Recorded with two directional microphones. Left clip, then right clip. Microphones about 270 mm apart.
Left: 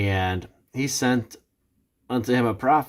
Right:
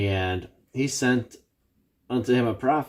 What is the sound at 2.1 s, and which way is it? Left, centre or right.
Speech, left.